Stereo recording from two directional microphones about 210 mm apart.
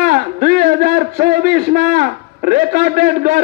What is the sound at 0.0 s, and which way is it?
A man's voice, 45° right (ahead or behind).